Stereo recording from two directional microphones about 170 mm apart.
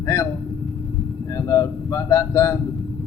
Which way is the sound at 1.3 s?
20° left (ahead or behind).